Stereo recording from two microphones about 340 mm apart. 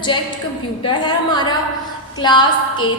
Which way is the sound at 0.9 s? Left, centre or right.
Centre.